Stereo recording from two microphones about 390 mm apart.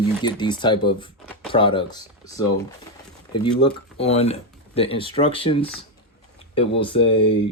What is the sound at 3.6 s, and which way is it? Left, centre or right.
Speech, centre.